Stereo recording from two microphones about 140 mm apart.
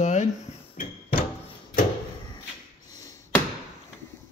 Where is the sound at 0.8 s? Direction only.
90° left.